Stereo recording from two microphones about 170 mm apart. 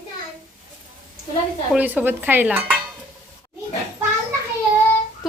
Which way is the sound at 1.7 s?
10° right (ahead or behind).